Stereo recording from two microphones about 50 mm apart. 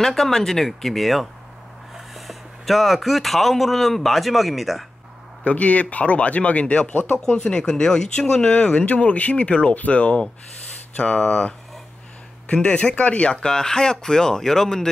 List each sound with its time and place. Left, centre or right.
0.0 s speech: centre
5.4 s speech: left
6.9 s speech: left
7.2 s speech: centre
11.0 s speech: centre
12.6 s speech: left